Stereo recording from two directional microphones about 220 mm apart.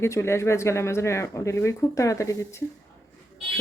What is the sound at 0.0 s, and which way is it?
A woman's voice, 10° left (ahead or behind).